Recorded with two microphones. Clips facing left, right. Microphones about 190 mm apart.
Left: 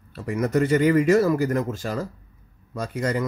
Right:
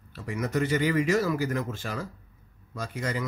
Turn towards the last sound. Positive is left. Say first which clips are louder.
# left 6 dB
turn(degrees=45)  # may be behind; listen again after turning